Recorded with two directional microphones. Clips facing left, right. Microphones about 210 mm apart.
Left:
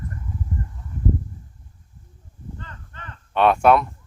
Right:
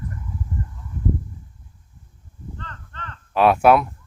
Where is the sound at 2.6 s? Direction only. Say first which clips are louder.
Right 2 dB; 10° left (ahead or behind).